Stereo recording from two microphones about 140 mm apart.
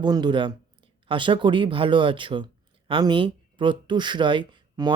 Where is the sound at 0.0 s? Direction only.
30° right (ahead or behind).